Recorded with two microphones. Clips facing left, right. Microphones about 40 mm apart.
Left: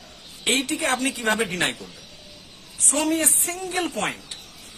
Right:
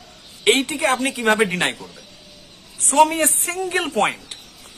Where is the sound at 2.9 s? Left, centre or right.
Right.